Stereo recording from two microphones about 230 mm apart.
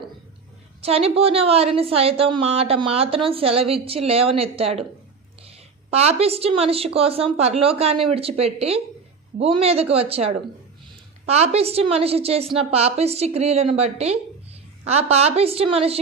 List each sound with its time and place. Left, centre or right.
0.8 s a woman's voice: right